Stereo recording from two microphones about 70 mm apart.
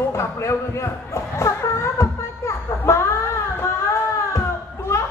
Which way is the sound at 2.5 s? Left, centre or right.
Left.